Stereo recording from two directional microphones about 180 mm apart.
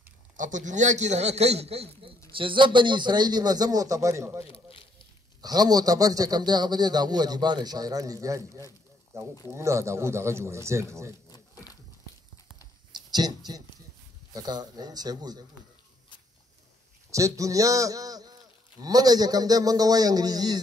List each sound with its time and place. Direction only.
0.4 s a man's voice: 45° right (ahead or behind); by 4.5 s 15° right (ahead or behind)
4.5 s a sound: 30° left (ahead or behind)
5.4 s a man's voice: 20° right (ahead or behind)
13.1 s a man's voice: 20° right (ahead or behind)
17.1 s a man's voice: 20° right (ahead or behind)